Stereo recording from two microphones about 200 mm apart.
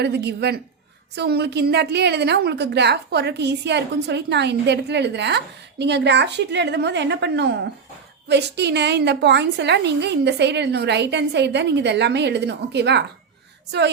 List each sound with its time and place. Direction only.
0.0 s a woman's voice: 55° right (ahead or behind)